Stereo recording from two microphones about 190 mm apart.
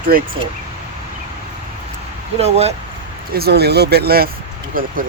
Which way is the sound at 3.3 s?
55° right (ahead or behind).